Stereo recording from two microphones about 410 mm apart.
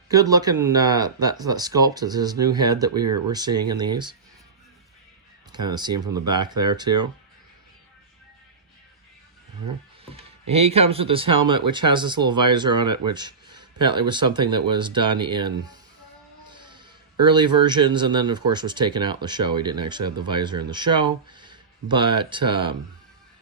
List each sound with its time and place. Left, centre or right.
0.1 s speech: centre
5.5 s speech: centre
10.1 s speech: centre